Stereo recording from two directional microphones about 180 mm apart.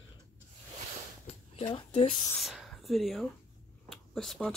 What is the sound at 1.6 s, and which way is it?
Speech, 25° left (ahead or behind).